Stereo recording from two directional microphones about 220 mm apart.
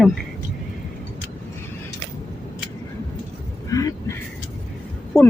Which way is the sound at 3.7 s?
15° left (ahead or behind).